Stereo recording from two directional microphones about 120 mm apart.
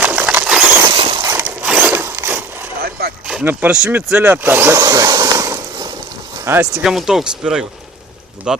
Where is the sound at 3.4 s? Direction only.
10° right (ahead or behind).